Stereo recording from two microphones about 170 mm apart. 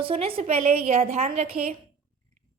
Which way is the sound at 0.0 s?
35° right (ahead or behind).